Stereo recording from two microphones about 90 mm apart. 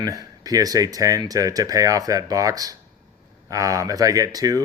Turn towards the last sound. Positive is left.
turn(degrees=-45)  # may be behind; listen again after turning